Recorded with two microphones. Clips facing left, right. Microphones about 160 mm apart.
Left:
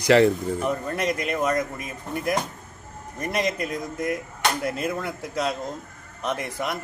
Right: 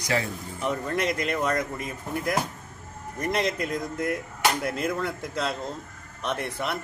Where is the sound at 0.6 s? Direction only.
5° left (ahead or behind).